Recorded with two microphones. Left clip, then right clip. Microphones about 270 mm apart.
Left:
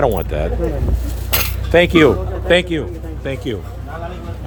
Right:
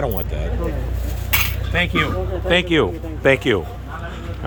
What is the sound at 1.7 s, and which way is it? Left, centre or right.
Speech, centre.